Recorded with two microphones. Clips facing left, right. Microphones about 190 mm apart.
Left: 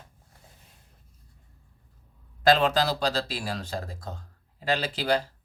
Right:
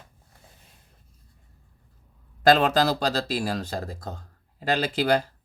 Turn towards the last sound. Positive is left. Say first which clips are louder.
# right 3 dB
turn(degrees=-45)  # may be behind; listen again after turning